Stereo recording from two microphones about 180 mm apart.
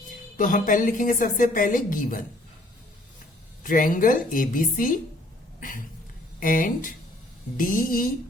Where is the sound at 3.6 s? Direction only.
50° left (ahead or behind).